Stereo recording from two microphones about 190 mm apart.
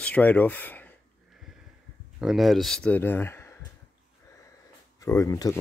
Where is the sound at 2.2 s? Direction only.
Centre (ahead or behind).